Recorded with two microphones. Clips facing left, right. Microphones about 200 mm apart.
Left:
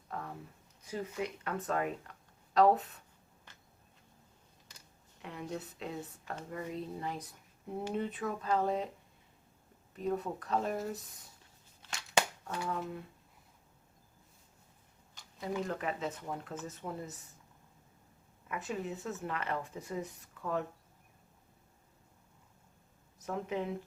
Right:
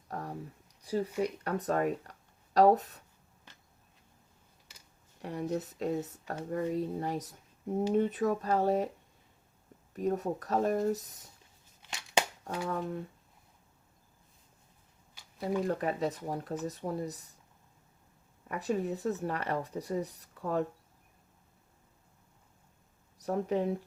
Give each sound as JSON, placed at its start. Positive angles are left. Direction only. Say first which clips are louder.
{"t": 0.1, "sound": "a sound", "louder": "right 3 dB", "side_deg": -40}
{"t": 0.8, "sound": "speech", "louder": "right 6 dB", "side_deg": -35}
{"t": 5.2, "sound": "speech", "louder": "right 7 dB", "side_deg": -40}
{"t": 9.9, "sound": "speech", "louder": "right 4 dB", "side_deg": -45}
{"t": 11.8, "sound": "scissors", "louder": "right 1 dB", "side_deg": -15}
{"t": 15.4, "sound": "speech", "louder": "right 5 dB", "side_deg": -40}
{"t": 18.4, "sound": "speech", "louder": "right 6 dB", "side_deg": -40}
{"t": 23.1, "sound": "speech", "louder": "right 6 dB", "side_deg": -40}